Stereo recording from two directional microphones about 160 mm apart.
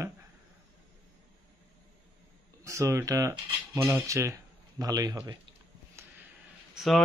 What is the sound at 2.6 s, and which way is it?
A man's voice, 20° right (ahead or behind).